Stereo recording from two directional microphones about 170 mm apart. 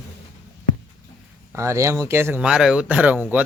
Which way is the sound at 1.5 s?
15° right (ahead or behind).